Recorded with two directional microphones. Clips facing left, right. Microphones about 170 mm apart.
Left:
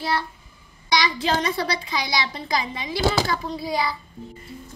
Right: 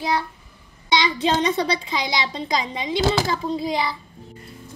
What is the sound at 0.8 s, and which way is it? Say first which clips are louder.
A woman's voice: right 2 dB; 20° right (ahead or behind).